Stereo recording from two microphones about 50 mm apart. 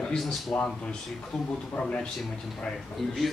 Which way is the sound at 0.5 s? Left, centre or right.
Centre.